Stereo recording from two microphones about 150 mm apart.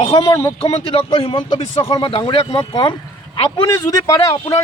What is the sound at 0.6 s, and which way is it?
Speech, 40° left (ahead or behind).